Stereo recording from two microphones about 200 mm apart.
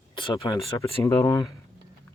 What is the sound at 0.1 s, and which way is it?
Speech, 25° left (ahead or behind).